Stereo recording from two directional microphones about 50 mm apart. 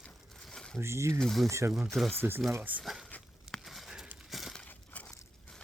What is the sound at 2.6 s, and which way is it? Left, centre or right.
Speech, right.